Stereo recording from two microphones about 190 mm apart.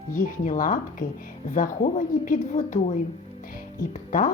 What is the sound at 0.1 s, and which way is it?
A woman's voice, 45° left (ahead or behind).